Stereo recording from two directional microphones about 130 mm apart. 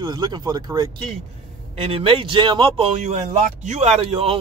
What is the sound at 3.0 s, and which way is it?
A man's voice, 60° right (ahead or behind).